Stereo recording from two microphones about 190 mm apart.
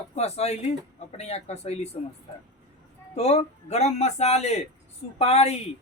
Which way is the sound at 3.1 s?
35° left (ahead or behind).